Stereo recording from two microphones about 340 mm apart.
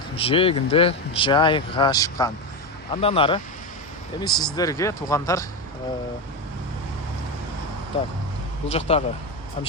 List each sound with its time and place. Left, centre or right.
0.2 s speech: centre
8.7 s speech: centre